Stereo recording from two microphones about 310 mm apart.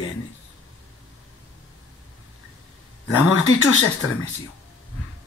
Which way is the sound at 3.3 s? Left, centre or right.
Left.